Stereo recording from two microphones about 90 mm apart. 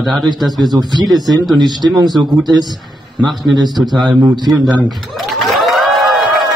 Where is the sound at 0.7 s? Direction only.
45° right (ahead or behind).